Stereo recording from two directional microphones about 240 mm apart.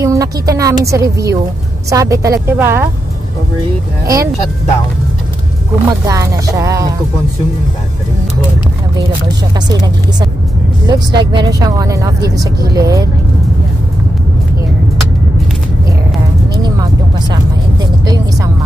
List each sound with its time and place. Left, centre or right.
0.0 s a woman's voice: centre
4.0 s speech: centre
5.9 s speech: centre
10.9 s speech: centre
16.6 s music: centre
18.0 s vehicle: centre